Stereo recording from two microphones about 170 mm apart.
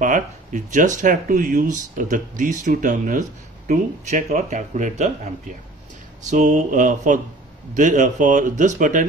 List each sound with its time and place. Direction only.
0.0 s speech: 50° right (ahead or behind)